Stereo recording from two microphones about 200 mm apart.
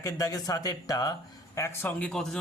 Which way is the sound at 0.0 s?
15° left (ahead or behind).